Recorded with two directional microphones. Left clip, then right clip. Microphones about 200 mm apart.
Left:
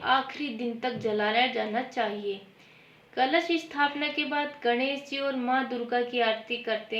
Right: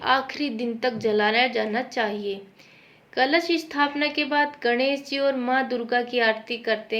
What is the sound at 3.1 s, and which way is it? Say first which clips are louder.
A woman's voice: right 4 dB; 25° right (ahead or behind).